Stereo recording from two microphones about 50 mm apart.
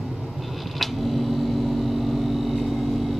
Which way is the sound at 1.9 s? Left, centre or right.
Centre.